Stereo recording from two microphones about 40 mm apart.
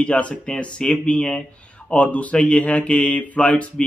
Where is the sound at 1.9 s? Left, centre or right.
Left.